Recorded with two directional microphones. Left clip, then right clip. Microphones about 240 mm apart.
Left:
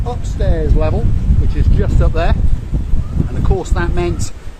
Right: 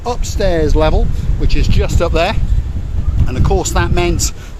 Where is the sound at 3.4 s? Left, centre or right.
Right.